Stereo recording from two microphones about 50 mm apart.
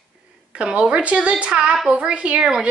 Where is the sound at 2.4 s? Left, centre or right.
Centre.